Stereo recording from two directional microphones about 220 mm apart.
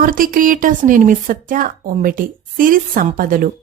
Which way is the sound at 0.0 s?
40° right (ahead or behind).